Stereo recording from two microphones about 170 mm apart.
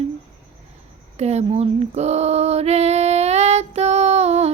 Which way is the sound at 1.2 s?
40° right (ahead or behind).